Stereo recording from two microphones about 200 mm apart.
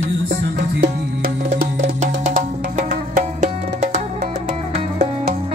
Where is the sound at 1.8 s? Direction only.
35° right (ahead or behind).